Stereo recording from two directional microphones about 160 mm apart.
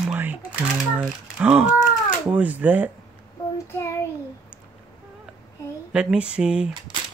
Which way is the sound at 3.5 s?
15° left (ahead or behind).